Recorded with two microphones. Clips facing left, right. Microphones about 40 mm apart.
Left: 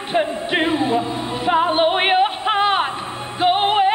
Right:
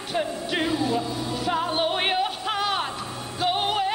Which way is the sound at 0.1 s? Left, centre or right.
Left.